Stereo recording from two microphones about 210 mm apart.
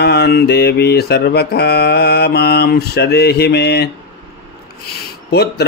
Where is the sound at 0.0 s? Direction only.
50° left (ahead or behind).